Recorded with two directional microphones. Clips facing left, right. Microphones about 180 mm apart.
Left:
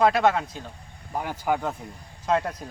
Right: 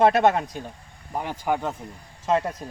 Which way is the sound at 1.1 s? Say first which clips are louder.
Even; centre (ahead or behind).